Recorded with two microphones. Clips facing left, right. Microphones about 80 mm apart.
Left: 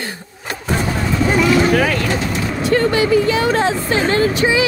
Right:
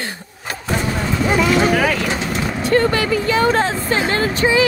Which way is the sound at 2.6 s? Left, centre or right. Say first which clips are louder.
Left 1 dB; right.